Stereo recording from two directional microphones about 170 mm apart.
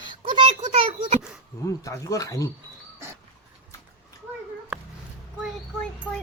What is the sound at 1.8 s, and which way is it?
Speech, 20° left (ahead or behind).